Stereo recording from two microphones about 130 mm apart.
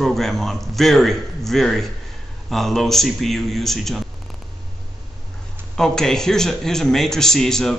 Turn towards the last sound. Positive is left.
turn(degrees=5)  # may be behind; listen again after turning